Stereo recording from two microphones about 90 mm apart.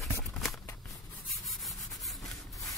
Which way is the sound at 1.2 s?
Centre (ahead or behind).